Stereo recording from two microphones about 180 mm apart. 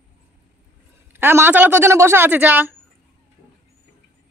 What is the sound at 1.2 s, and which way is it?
A woman's voice, 10° right (ahead or behind).